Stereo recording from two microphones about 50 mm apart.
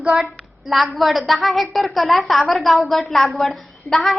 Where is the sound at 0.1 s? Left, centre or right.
Centre.